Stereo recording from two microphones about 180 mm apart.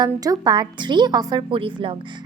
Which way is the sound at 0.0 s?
20° right (ahead or behind).